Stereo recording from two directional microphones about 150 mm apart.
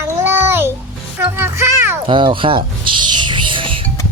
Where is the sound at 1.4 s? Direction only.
15° right (ahead or behind).